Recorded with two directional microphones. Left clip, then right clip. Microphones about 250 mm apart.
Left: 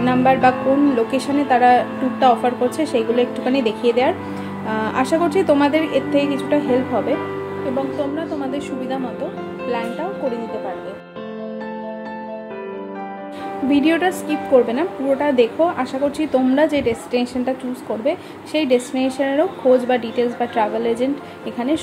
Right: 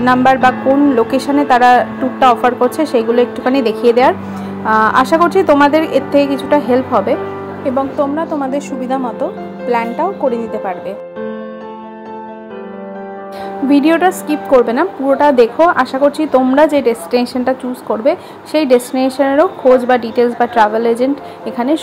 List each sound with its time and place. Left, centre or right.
0.0 s a woman's voice: centre
8.5 s a woman's voice: centre
13.7 s a woman's voice: centre